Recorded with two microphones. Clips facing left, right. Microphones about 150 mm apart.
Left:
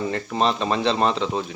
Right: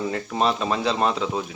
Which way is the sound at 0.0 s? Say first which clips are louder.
Left 1 dB; centre (ahead or behind).